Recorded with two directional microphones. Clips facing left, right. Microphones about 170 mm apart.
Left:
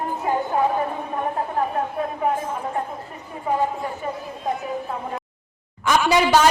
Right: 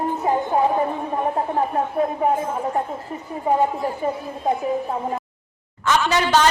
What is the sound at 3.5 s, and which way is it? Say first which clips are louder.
Speech: right 4 dB; 30° right (ahead or behind).